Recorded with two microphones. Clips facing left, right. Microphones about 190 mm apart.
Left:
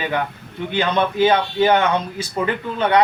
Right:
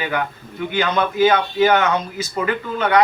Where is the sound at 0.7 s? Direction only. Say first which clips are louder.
Even; 30° left (ahead or behind).